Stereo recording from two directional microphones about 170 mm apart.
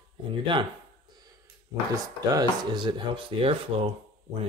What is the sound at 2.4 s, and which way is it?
Speech, 25° right (ahead or behind).